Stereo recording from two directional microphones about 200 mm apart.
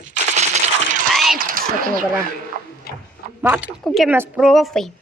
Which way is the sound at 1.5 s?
45° right (ahead or behind).